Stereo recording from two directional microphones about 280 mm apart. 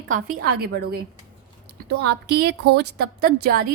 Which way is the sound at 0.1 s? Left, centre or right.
Right.